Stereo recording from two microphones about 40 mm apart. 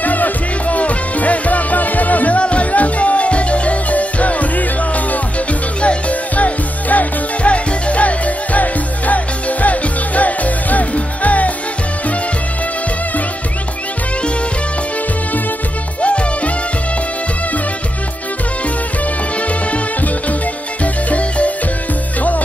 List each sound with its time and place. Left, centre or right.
0.0 s music: left
16.0 s music: left
19.4 s music: left